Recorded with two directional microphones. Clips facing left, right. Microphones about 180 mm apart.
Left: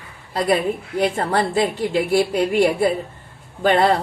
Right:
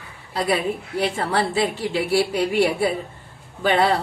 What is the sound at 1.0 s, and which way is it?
Speech, 45° left (ahead or behind).